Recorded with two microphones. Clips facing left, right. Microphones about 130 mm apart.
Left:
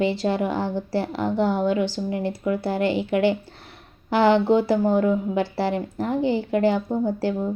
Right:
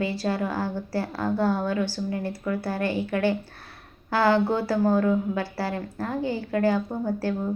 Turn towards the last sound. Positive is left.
turn(degrees=20)  # may be behind; listen again after turning